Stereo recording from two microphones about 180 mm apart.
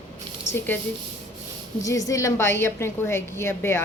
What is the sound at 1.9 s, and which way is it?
A woman's voice, 20° left (ahead or behind).